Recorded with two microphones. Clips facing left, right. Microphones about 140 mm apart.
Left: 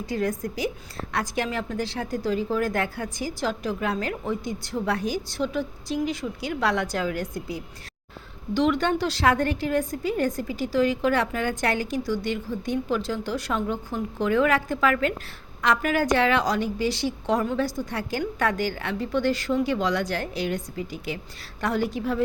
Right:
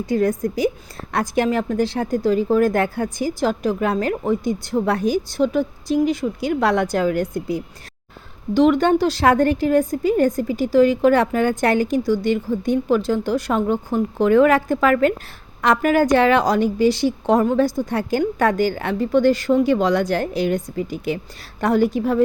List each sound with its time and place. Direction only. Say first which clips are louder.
0.1 s a woman's voice: right 8 dB; 45° right (ahead or behind)